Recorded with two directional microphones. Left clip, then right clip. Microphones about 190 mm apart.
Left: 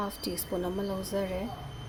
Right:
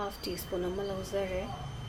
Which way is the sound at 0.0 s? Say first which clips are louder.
Left 2 dB; 25° left (ahead or behind).